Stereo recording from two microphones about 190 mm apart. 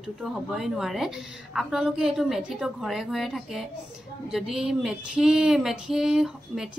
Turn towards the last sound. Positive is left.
turn(degrees=0)  # may be behind; listen again after turning